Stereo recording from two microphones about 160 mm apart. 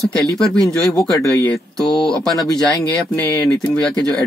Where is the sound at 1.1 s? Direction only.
20° left (ahead or behind).